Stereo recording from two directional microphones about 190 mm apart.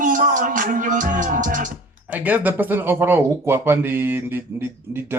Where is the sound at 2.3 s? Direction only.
10° right (ahead or behind).